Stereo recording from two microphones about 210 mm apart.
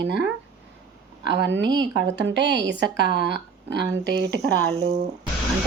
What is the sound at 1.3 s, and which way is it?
Speech, 55° right (ahead or behind).